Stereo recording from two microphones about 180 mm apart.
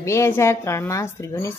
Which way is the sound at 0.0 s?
15° left (ahead or behind).